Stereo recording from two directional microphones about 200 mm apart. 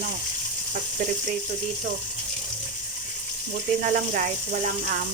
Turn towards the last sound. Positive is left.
turn(degrees=-40)  # may be behind; listen again after turning